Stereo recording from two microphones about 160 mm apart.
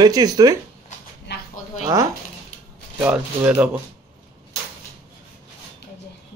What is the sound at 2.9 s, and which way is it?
Speech, 10° right (ahead or behind).